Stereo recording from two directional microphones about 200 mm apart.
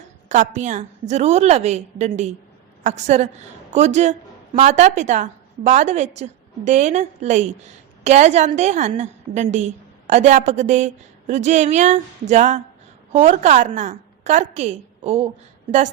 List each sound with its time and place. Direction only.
0.3 s a woman's voice: 40° right (ahead or behind)